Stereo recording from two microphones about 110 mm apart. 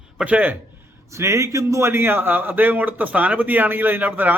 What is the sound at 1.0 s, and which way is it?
A man's voice, 30° right (ahead or behind).